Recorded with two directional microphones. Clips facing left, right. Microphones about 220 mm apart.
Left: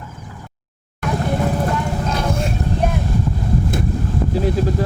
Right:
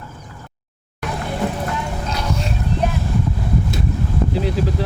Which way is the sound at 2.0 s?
50° left (ahead or behind).